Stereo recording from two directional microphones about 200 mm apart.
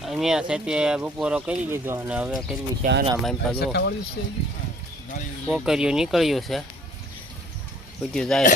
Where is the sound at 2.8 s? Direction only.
40° right (ahead or behind).